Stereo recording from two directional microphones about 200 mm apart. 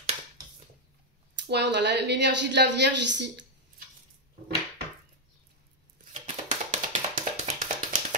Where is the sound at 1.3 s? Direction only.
60° right (ahead or behind).